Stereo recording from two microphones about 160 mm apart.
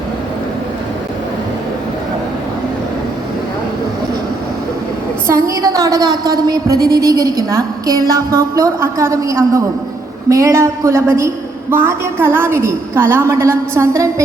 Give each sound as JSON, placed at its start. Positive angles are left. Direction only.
{"t": 5.3, "sound": "a woman's voice", "side_deg": -20}